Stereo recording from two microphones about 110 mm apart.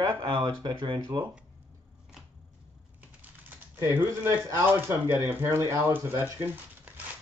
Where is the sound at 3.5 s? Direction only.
20° right (ahead or behind).